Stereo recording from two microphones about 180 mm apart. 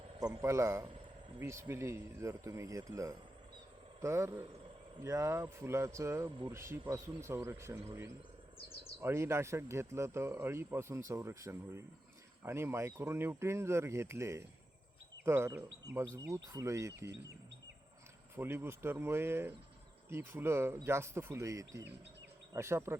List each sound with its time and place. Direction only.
0.4 s speech: 15° right (ahead or behind)
18.3 s speech: 10° right (ahead or behind)